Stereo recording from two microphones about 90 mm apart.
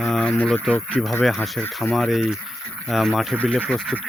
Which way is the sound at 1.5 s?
5° left (ahead or behind).